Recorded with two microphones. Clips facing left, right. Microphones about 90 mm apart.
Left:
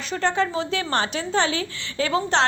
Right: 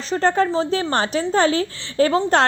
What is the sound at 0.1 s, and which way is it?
A woman's voice, 40° right (ahead or behind).